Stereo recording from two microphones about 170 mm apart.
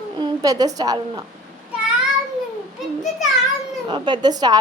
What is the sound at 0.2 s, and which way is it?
A woman's voice, 25° right (ahead or behind).